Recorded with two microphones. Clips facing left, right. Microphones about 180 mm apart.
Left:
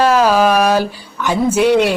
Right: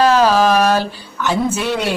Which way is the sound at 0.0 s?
10° left (ahead or behind).